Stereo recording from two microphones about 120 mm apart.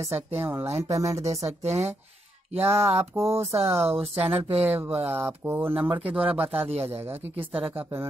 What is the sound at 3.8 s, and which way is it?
Speech, 55° right (ahead or behind).